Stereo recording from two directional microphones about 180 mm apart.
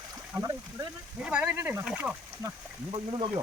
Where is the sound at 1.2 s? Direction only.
5° right (ahead or behind).